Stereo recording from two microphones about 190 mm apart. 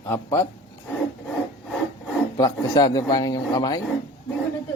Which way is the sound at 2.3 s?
20° left (ahead or behind).